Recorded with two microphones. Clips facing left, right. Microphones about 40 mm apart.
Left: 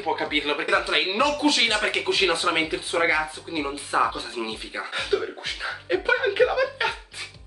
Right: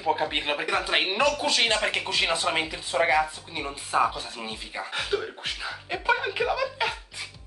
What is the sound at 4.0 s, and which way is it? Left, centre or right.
Speech, left.